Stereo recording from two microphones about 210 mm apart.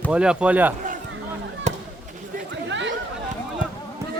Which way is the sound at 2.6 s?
60° right (ahead or behind).